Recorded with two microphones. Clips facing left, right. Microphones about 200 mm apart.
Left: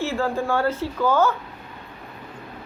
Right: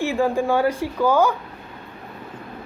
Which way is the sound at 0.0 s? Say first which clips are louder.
Right 4 dB; 15° right (ahead or behind).